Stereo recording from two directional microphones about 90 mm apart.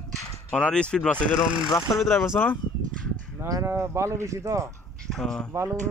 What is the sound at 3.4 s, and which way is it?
Speech, 35° right (ahead or behind).